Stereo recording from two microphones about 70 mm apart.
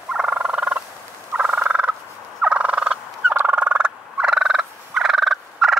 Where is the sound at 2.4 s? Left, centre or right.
Centre.